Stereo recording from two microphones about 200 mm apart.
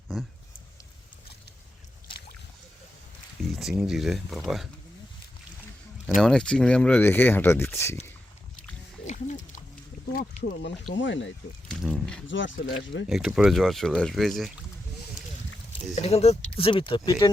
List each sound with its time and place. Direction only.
3.5 s speech: centre (ahead or behind)
6.1 s speech: 5° left (ahead or behind)
9.0 s a sound: 40° left (ahead or behind)
10.6 s speech: 65° left (ahead or behind)
11.7 s speech: centre (ahead or behind)
12.3 s speech: 70° left (ahead or behind)
13.1 s speech: 5° right (ahead or behind)
16.0 s speech: 30° left (ahead or behind)